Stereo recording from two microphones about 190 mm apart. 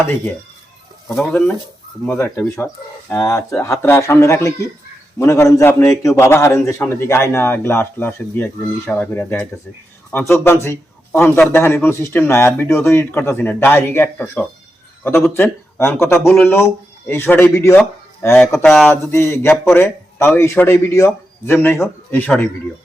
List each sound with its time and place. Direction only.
1.0 s a man's voice: 5° left (ahead or behind)
18.6 s speech: centre (ahead or behind)
19.0 s a man's voice: 15° left (ahead or behind)